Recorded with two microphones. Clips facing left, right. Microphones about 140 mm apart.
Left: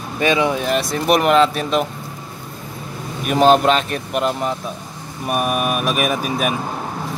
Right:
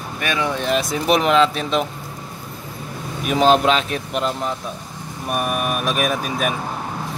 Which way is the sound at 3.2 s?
Centre (ahead or behind).